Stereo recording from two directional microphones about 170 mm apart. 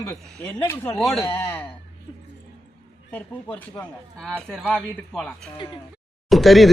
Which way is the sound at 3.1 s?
10° left (ahead or behind).